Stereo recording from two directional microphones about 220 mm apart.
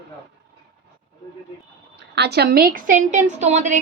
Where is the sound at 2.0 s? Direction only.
50° right (ahead or behind); by 3.8 s 35° right (ahead or behind).